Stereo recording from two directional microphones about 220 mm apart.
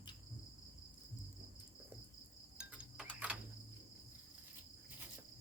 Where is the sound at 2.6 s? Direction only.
5° right (ahead or behind).